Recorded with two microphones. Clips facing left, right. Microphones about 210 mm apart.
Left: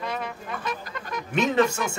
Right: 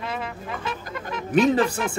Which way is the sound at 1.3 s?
35° right (ahead or behind).